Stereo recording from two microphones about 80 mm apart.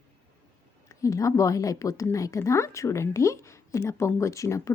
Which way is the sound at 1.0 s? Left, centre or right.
Left.